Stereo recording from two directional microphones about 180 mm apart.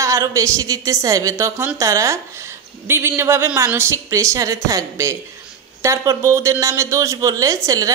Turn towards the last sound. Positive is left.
turn(degrees=-20)  # may be behind; listen again after turning